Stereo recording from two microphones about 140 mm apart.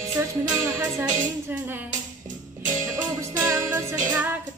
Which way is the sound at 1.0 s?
65° right (ahead or behind).